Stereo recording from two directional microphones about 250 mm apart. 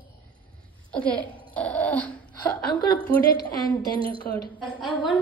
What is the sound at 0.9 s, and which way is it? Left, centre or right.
Speech, centre.